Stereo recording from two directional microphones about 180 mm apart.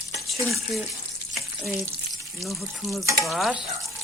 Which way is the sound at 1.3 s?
Centre (ahead or behind).